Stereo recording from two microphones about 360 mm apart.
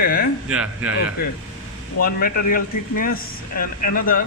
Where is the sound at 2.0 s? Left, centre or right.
Left.